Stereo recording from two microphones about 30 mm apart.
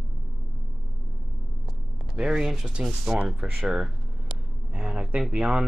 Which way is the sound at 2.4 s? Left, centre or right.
Centre.